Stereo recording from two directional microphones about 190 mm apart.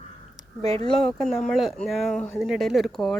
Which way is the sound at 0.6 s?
35° right (ahead or behind).